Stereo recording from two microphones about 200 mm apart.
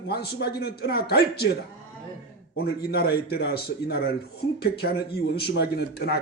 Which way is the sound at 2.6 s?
50° left (ahead or behind).